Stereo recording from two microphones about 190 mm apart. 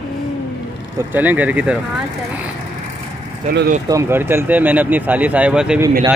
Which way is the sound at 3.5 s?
50° right (ahead or behind).